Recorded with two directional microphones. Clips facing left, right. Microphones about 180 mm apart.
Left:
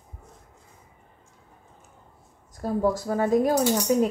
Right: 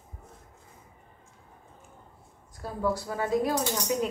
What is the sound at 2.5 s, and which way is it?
Speech, 45° left (ahead or behind).